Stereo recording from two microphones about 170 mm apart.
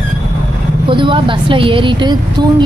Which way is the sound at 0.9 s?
30° right (ahead or behind).